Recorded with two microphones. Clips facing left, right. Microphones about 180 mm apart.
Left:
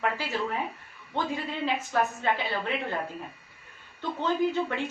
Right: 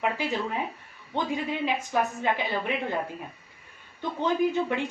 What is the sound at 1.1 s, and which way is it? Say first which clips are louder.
A woman's voice: right 2 dB; 15° right (ahead or behind).